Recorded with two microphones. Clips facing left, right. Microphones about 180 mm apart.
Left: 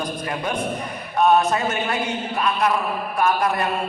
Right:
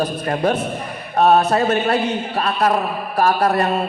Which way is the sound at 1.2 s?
35° right (ahead or behind).